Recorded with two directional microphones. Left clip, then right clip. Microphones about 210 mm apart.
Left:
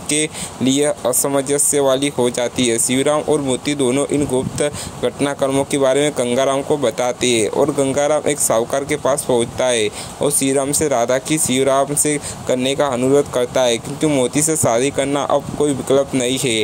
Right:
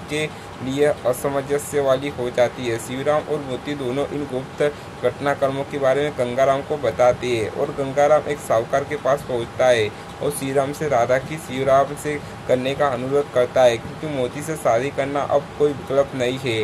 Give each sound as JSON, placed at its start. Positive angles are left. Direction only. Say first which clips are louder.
{"t": 0.1, "sound": "speech", "louder": "left 5 dB", "side_deg": 35}